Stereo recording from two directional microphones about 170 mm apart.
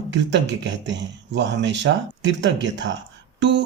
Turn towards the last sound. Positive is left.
turn(degrees=-90)